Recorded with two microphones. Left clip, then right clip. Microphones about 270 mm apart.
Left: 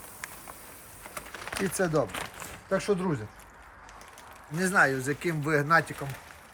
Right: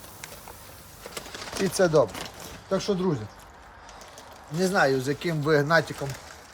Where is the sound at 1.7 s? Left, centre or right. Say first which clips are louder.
Right 7 dB; centre.